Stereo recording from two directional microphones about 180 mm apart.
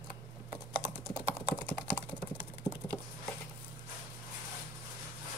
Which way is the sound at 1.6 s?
10° left (ahead or behind).